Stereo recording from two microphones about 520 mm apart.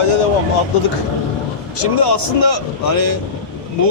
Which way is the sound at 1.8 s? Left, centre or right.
Left.